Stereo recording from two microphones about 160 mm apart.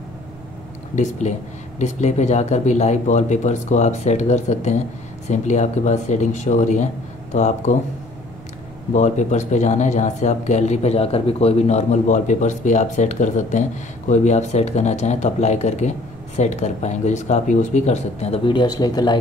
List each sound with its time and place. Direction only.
0.9 s speech: 50° left (ahead or behind)
8.9 s speech: 50° left (ahead or behind); by 19.1 s 25° left (ahead or behind)